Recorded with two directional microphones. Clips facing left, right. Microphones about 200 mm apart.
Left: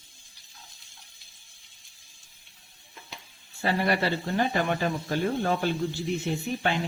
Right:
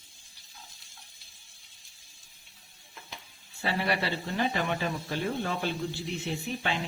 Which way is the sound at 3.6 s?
45° left (ahead or behind).